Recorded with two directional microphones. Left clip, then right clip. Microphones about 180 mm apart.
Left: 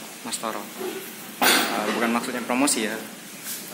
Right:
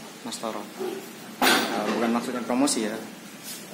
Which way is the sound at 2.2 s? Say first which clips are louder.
Left 2 dB; 10° right (ahead or behind).